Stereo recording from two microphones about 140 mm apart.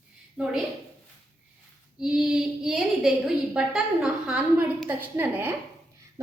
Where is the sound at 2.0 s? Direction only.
5° right (ahead or behind).